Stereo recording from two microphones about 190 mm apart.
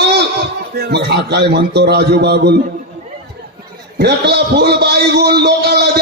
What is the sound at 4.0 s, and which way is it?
A man's voice, 60° right (ahead or behind).